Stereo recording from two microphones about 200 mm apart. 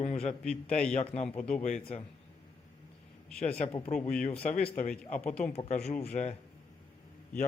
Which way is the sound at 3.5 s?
30° left (ahead or behind).